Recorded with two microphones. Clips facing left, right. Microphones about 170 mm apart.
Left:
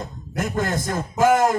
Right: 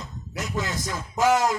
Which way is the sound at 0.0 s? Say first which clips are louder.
Left 7 dB; 55° left (ahead or behind).